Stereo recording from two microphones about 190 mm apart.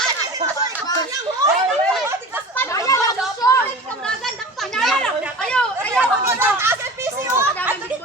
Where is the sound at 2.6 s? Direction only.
15° left (ahead or behind).